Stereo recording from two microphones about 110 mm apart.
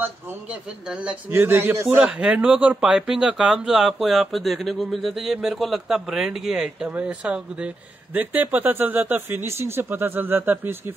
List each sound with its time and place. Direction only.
1.3 s speech: 20° right (ahead or behind)
2.0 s speech: 10° right (ahead or behind)